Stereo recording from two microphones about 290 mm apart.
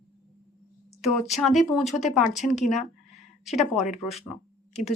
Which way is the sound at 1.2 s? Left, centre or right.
Centre.